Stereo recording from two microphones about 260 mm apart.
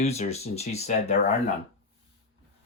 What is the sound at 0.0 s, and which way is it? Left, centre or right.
Speech, left.